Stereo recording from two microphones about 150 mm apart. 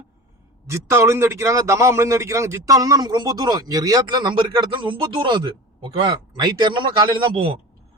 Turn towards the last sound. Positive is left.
turn(degrees=-35)  # may be behind; listen again after turning